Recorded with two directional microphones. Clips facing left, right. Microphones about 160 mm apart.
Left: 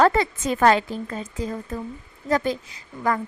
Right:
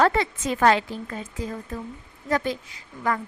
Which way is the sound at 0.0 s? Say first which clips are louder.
Left 2 dB; 40° left (ahead or behind).